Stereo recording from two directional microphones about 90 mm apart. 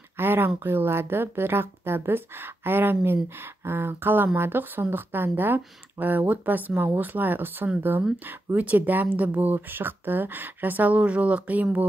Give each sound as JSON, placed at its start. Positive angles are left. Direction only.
{"t": 0.2, "sound": "speech", "side_deg": -25}